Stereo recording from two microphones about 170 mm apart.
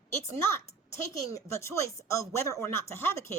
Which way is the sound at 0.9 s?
20° left (ahead or behind).